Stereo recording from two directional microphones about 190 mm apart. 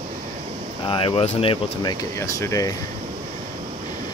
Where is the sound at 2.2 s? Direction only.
15° left (ahead or behind).